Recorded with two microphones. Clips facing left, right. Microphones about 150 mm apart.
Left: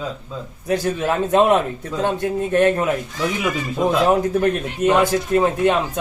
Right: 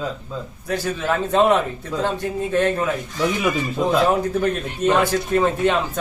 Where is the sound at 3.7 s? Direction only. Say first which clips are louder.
Left 3 dB; 15° left (ahead or behind).